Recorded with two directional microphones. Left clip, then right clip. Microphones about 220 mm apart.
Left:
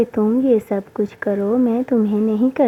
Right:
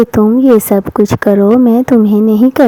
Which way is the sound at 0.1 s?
45° right (ahead or behind).